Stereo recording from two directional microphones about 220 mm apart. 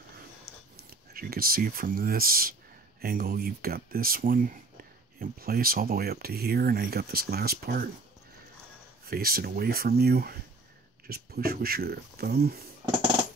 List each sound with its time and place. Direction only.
0.8 s speech: 40° right (ahead or behind)
9.0 s speech: 45° right (ahead or behind)